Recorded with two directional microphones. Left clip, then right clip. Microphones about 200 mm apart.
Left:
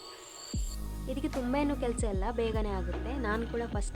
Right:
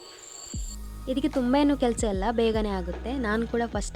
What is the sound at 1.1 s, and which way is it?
A woman's voice, 30° right (ahead or behind).